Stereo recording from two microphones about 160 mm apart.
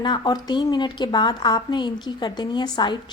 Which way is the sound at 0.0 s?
25° left (ahead or behind).